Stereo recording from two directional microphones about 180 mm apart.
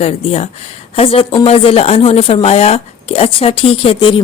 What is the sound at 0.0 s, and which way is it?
Speech, 35° left (ahead or behind).